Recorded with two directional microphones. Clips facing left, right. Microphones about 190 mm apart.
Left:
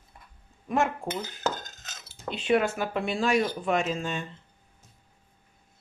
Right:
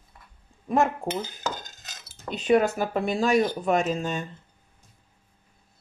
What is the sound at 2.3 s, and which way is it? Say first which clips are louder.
Speech: right 3 dB; 40° right (ahead or behind).